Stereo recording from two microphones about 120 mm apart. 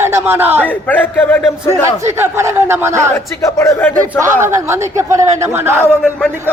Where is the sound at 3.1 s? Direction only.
25° left (ahead or behind).